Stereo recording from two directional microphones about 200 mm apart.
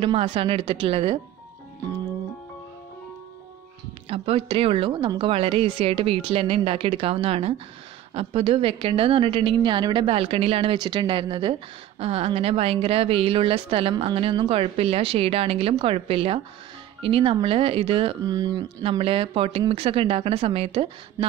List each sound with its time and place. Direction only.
0.0 s speech: 25° right (ahead or behind)
4.1 s speech: 30° right (ahead or behind)